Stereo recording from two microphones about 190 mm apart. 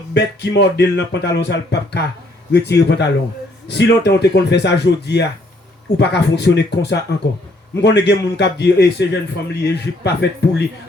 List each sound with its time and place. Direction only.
0.1 s speech: 65° left (ahead or behind)